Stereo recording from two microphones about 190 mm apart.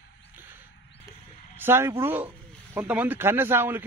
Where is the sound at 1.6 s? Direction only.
10° right (ahead or behind).